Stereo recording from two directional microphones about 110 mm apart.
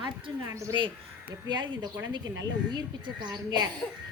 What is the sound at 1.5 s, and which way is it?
A woman's voice, 45° right (ahead or behind).